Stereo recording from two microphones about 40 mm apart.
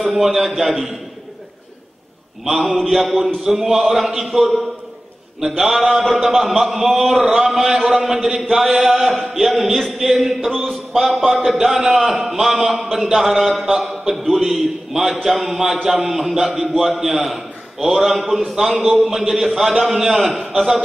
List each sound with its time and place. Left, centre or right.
0.1 s a man's voice: centre
2.4 s a man's voice: centre
5.6 s a man's voice: centre